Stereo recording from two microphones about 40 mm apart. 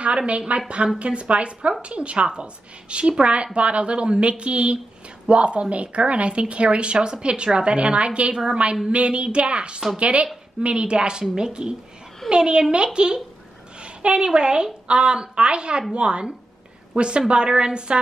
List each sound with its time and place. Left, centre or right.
0.5 s a woman's voice: right